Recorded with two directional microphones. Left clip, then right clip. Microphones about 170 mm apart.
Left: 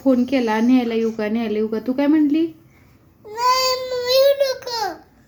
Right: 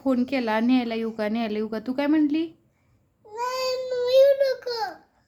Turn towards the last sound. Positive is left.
turn(degrees=-15)  # may be behind; listen again after turning